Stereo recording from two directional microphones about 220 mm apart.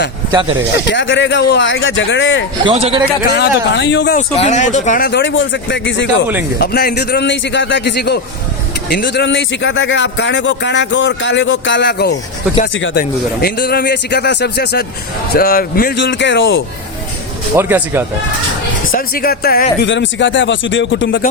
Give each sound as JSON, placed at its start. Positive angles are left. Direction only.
{"t": 0.3, "sound": "speech", "side_deg": -20}
{"t": 0.9, "sound": "a man's voice", "side_deg": 55}
{"t": 2.6, "sound": "a man's voice", "side_deg": -25}
{"t": 3.2, "sound": "a man's voice", "side_deg": 50}
{"t": 4.4, "sound": "a man's voice", "side_deg": 30}
{"t": 6.6, "sound": "a man's voice", "side_deg": 45}
{"t": 17.6, "sound": "speech", "side_deg": -10}
{"t": 18.9, "sound": "a man's voice", "side_deg": 40}
{"t": 19.8, "sound": "a man's voice", "side_deg": 55}